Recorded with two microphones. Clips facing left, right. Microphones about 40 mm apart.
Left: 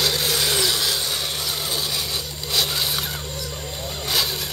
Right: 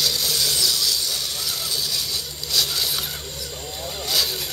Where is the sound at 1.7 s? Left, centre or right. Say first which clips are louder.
Left 1 dB; left.